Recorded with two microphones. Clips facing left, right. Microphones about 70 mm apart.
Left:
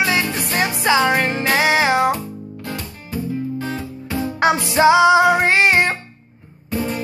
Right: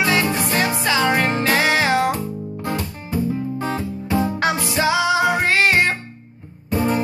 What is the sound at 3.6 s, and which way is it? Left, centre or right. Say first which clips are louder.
Music: right 2 dB; right.